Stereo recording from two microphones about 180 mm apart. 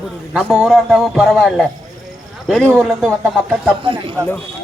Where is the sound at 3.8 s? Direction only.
25° right (ahead or behind).